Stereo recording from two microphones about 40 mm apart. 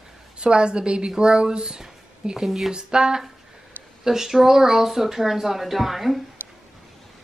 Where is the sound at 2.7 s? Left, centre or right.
Centre.